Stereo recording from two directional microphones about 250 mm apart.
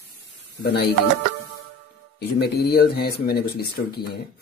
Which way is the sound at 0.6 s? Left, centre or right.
Left.